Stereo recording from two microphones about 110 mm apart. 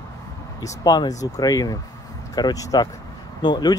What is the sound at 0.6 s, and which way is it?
Speech, 35° left (ahead or behind).